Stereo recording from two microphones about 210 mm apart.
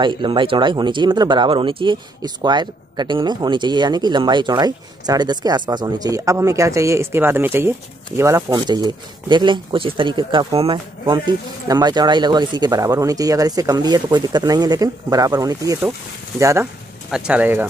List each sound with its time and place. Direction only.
0.0 s speech: 25° right (ahead or behind)